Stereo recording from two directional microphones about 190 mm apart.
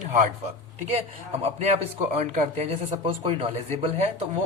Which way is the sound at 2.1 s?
40° right (ahead or behind).